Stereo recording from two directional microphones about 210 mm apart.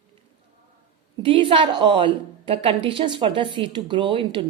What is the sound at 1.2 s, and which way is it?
A woman's voice, 25° right (ahead or behind).